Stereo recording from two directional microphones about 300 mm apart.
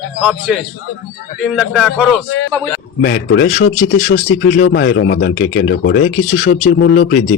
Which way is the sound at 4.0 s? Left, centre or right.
Left.